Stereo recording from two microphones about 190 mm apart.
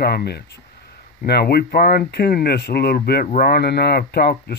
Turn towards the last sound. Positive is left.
turn(degrees=55)  # may be behind; listen again after turning